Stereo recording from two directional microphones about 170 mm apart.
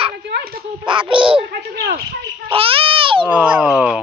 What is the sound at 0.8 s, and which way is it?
Child singing, 30° right (ahead or behind).